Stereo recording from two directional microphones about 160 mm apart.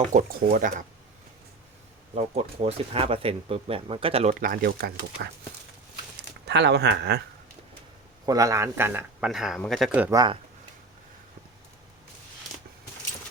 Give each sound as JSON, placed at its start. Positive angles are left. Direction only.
{"t": 0.1, "sound": "speech", "side_deg": -55}
{"t": 2.1, "sound": "speech", "side_deg": -40}
{"t": 4.4, "sound": "speech", "side_deg": -65}
{"t": 6.5, "sound": "speech", "side_deg": -90}
{"t": 8.3, "sound": "speech", "side_deg": -20}
{"t": 9.3, "sound": "speech", "side_deg": -5}
{"t": 10.0, "sound": "speech", "side_deg": -20}